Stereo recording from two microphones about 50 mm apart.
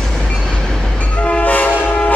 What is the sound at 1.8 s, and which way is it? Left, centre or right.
Train horn, left.